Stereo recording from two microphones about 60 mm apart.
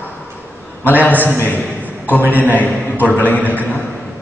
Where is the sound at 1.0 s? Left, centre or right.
Left.